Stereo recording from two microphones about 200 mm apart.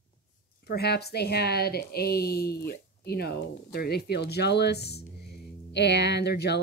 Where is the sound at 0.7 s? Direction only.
55° left (ahead or behind).